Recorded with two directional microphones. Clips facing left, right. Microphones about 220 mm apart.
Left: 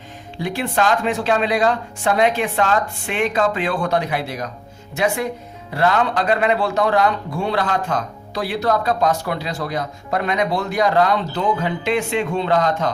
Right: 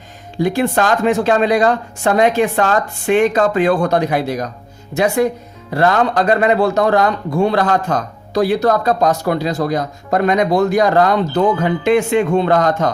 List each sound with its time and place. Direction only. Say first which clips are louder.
0.4 s speech: right 5 dB; 45° right (ahead or behind)